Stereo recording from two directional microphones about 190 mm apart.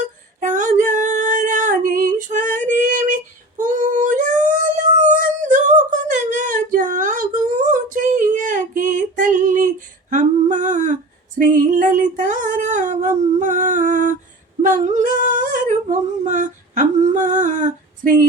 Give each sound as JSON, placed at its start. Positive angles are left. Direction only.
{"t": 0.3, "sound": "female singing", "side_deg": -40}
{"t": 5.2, "sound": "a sound", "side_deg": -40}
{"t": 14.6, "sound": "humming", "side_deg": -40}